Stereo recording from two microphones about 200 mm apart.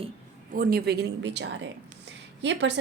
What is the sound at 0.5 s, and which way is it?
A woman's voice, 45° right (ahead or behind).